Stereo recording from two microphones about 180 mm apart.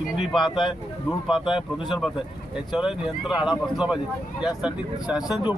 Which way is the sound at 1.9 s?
Centre (ahead or behind).